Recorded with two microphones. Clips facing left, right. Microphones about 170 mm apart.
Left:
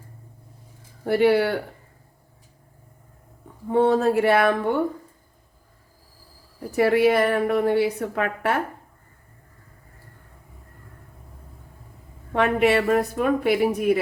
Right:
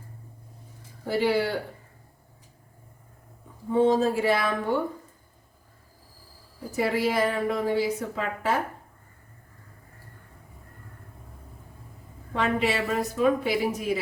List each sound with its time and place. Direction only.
1.0 s a woman's voice: 60° left (ahead or behind)
3.7 s a woman's voice: 65° left (ahead or behind)
6.7 s a woman's voice: 65° left (ahead or behind)
12.3 s a woman's voice: 60° left (ahead or behind)